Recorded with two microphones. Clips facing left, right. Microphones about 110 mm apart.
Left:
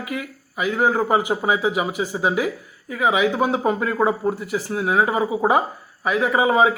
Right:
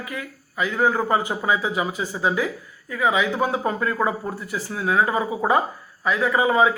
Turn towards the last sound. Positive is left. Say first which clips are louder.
# left 2 dB
turn(degrees=20)  # may be behind; listen again after turning